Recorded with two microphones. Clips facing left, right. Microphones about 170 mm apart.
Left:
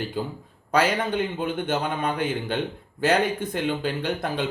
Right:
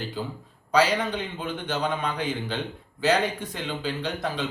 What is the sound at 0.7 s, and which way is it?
Speech, 55° left (ahead or behind).